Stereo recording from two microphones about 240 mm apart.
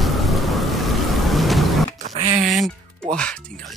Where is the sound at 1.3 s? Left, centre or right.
Centre.